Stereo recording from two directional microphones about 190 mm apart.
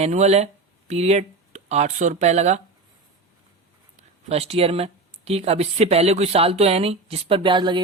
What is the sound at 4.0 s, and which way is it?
Speech, 35° right (ahead or behind).